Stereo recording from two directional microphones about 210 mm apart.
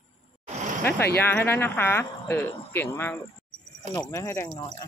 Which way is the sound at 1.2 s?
10° left (ahead or behind).